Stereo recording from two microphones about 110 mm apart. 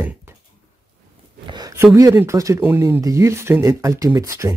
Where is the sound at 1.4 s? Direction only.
40° right (ahead or behind).